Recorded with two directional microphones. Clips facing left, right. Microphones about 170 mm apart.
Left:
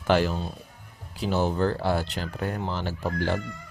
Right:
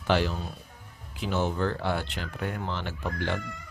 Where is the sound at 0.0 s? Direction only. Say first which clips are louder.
Left 3 dB; 45° left (ahead or behind).